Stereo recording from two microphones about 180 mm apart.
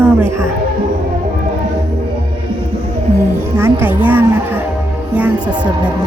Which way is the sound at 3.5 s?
10° right (ahead or behind).